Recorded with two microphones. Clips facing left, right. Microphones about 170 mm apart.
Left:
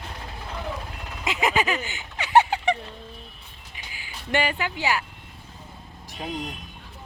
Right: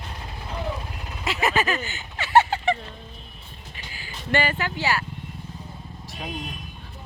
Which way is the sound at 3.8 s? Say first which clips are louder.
Right 1 dB; 15° left (ahead or behind).